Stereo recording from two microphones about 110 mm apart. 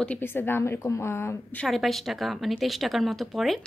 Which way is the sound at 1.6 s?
Centre (ahead or behind).